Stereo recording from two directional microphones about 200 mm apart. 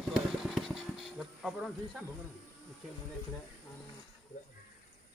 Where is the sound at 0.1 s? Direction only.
Centre (ahead or behind).